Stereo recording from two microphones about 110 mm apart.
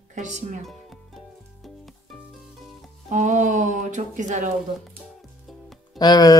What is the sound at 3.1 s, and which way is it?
Speech, 90° right.